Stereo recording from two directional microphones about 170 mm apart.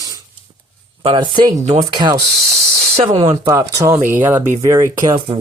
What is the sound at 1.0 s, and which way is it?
Speech, 25° right (ahead or behind).